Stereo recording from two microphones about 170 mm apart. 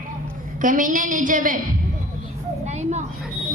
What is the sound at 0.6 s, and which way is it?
A man's voice, 50° right (ahead or behind).